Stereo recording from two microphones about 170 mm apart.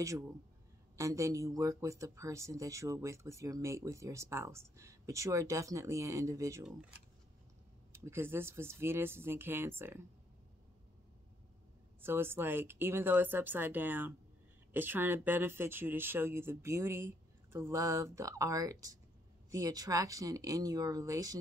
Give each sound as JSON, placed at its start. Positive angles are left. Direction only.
{"t": 0.9, "sound": "speech", "side_deg": -20}
{"t": 7.9, "sound": "speech", "side_deg": -15}
{"t": 12.0, "sound": "speech", "side_deg": -15}